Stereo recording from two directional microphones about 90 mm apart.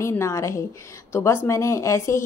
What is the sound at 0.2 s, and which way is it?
A woman's voice, 30° left (ahead or behind).